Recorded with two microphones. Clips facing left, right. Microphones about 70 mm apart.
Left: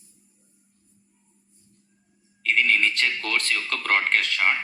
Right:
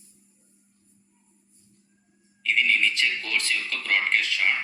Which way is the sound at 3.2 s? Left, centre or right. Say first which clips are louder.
Left 2 dB; left.